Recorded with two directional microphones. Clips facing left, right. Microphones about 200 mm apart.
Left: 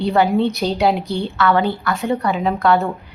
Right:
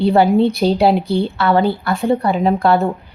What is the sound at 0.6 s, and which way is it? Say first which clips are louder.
A woman's voice: right 4 dB; 35° right (ahead or behind).